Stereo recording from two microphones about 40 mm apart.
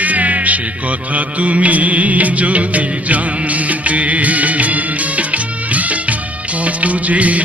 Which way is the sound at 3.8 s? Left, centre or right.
Right.